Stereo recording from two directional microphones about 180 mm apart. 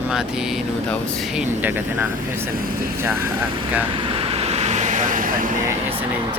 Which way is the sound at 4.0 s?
30° right (ahead or behind).